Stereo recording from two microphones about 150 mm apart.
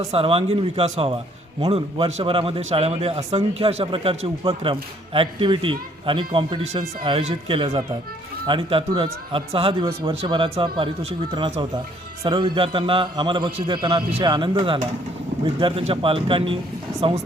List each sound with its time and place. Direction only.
0.1 s a man's voice: 40° right (ahead or behind)